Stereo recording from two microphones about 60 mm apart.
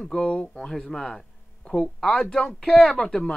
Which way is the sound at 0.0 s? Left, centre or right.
Centre.